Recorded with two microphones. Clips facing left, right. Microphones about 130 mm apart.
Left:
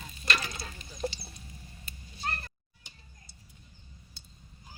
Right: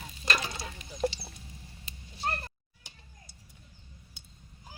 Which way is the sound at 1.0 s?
75° right (ahead or behind).